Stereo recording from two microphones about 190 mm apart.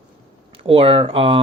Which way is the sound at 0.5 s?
30° right (ahead or behind).